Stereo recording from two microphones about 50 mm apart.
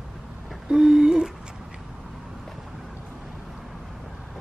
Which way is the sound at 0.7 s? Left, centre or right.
Centre.